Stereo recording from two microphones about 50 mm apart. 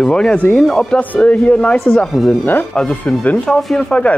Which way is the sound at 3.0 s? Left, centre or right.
Left.